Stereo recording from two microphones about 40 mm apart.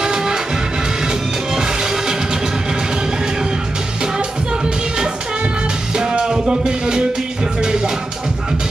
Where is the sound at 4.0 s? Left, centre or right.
Right.